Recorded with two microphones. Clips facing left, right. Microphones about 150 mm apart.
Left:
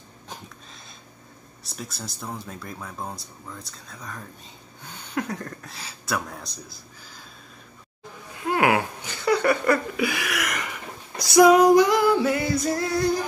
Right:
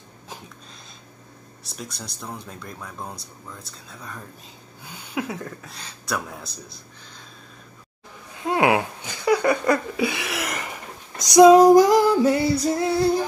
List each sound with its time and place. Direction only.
1.6 s speech: centre (ahead or behind)
8.5 s a sound: 20° right (ahead or behind)
11.1 s female singing: 20° right (ahead or behind)
11.5 s singing: 40° right (ahead or behind)